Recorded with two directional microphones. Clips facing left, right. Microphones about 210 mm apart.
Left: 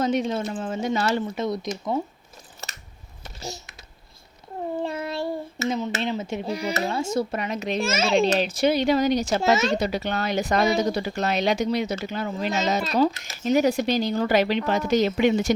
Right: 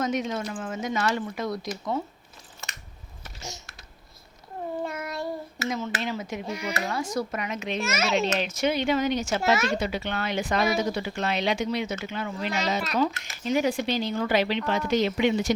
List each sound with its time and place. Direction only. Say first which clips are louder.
0.0 s speech: left 4 dB; 30° left (ahead or behind)
4.8 s a child's voice: left 5 dB; 30° left (ahead or behind)
9.4 s speech: left 3 dB; 25° left (ahead or behind)
9.7 s a child's voice: left 3 dB; 40° left (ahead or behind)
12.8 s speech: left 5 dB; 30° left (ahead or behind)
13.4 s a child's voice: left 4 dB; 40° left (ahead or behind)